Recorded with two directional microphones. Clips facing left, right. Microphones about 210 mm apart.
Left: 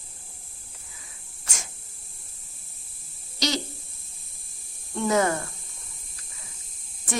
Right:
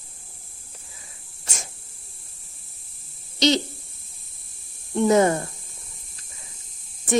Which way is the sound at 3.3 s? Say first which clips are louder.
Right 8 dB; 20° right (ahead or behind).